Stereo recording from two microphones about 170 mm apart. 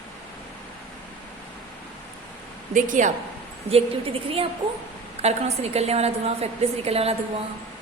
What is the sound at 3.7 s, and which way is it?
Speech, 35° right (ahead or behind).